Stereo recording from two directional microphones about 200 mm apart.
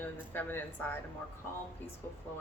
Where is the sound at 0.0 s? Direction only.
10° left (ahead or behind).